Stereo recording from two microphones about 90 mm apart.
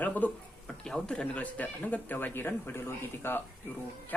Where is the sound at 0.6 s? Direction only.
5° left (ahead or behind); by 3.4 s 25° left (ahead or behind).